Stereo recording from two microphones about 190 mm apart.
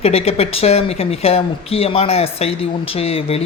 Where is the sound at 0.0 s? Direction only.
30° left (ahead or behind).